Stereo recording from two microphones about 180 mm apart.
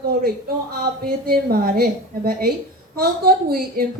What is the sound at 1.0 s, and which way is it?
A woman's voice, 55° right (ahead or behind).